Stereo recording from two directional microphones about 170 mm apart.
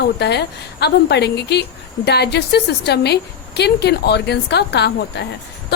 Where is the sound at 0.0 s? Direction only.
75° left (ahead or behind).